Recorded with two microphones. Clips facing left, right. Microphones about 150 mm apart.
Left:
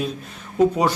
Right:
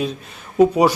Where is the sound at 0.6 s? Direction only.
10° right (ahead or behind).